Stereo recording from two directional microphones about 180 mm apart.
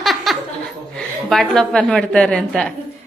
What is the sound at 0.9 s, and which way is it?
A woman's voice, centre (ahead or behind).